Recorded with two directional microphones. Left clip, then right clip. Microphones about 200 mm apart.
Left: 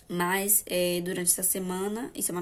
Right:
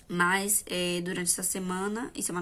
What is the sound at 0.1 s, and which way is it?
A woman's voice, 15° right (ahead or behind).